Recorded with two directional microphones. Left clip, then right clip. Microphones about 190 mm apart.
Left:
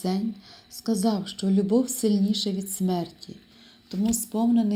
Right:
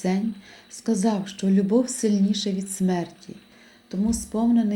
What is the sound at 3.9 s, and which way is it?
Speech, 20° left (ahead or behind).